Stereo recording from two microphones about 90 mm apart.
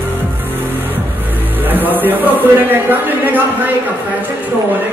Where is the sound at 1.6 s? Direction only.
20° right (ahead or behind).